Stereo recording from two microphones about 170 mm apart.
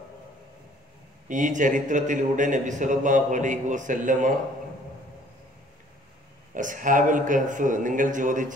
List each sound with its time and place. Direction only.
1.3 s a man's voice: 50° right (ahead or behind)
6.5 s a man's voice: 50° right (ahead or behind)